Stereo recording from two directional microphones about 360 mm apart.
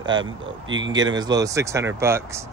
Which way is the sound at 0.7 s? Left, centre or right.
Right.